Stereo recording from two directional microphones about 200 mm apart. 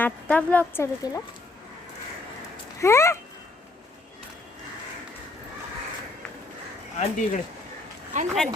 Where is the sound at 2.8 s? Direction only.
15° left (ahead or behind).